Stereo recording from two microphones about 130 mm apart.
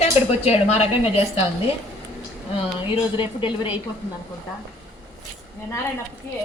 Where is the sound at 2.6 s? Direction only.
40° left (ahead or behind).